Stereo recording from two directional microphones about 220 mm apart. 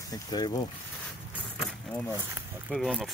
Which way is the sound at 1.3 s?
Centre (ahead or behind).